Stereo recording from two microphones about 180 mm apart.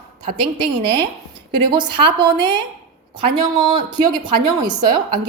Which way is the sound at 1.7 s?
30° right (ahead or behind).